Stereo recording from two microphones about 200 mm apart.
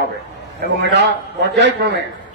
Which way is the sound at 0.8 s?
60° right (ahead or behind).